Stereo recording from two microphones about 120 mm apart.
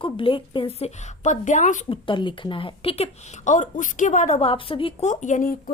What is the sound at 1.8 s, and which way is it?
A woman's voice, 45° left (ahead or behind).